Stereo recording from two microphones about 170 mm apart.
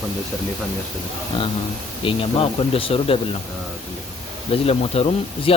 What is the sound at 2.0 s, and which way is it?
Speech, 35° left (ahead or behind).